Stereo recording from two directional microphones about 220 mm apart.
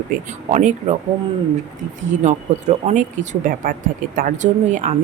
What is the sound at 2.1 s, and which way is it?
Speech, 30° right (ahead or behind).